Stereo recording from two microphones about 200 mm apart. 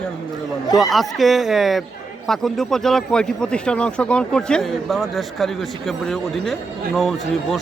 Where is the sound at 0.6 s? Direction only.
20° left (ahead or behind).